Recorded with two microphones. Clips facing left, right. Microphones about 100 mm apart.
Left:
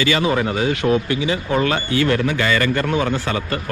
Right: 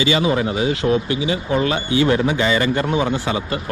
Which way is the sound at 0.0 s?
25° right (ahead or behind).